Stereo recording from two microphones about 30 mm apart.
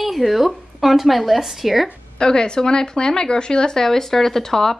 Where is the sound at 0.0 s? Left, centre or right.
Centre.